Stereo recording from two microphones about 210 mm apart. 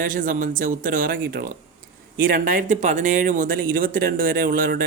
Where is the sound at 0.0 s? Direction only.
40° right (ahead or behind).